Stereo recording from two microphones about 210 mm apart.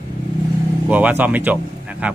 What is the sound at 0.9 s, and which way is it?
Speech, 5° right (ahead or behind).